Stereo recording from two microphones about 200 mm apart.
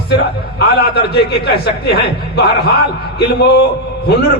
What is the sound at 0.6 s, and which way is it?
A man's voice, 50° left (ahead or behind).